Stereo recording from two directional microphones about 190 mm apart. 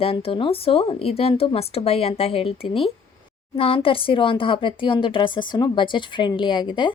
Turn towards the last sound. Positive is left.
turn(degrees=25)  # may be behind; listen again after turning